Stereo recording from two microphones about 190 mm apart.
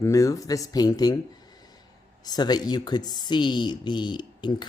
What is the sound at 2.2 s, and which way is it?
Speech, 20° left (ahead or behind).